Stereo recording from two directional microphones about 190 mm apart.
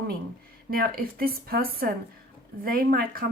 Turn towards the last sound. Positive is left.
turn(degrees=-50)  # may be behind; listen again after turning